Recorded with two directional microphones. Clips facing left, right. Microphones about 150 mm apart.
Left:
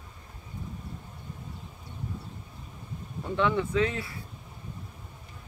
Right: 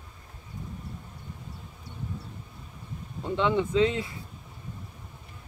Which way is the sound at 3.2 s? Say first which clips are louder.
Right 1 dB; 20° right (ahead or behind).